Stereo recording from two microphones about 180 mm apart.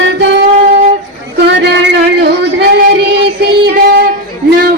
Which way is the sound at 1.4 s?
70° right (ahead or behind).